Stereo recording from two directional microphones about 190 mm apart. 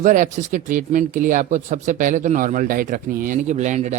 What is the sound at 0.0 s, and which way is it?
Speech, 40° right (ahead or behind).